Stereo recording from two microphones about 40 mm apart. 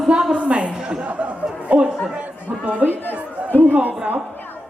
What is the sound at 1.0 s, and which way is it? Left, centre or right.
Speech, right.